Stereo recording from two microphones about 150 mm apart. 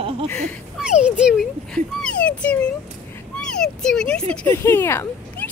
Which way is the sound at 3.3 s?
5° left (ahead or behind).